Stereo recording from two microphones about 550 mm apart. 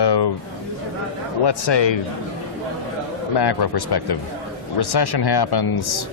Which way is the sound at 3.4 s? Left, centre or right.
Left.